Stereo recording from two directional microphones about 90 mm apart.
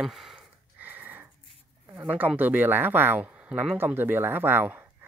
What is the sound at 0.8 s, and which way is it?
Wheeze, 20° right (ahead or behind).